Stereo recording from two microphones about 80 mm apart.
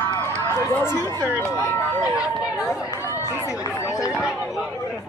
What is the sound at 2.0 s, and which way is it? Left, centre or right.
Speech, centre.